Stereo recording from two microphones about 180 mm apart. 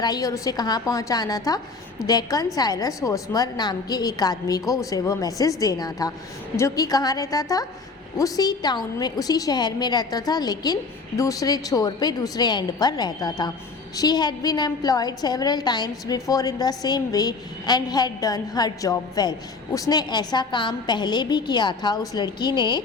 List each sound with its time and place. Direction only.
0.0 s a woman's voice: 20° left (ahead or behind)